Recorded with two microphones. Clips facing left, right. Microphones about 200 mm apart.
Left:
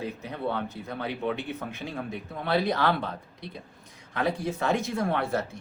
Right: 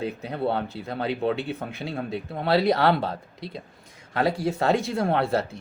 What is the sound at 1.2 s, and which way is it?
Speech, 35° right (ahead or behind).